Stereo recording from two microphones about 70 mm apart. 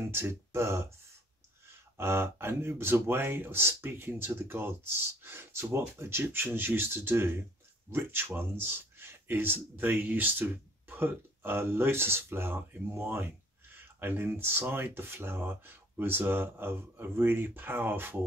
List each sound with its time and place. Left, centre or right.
0.1 s speech: right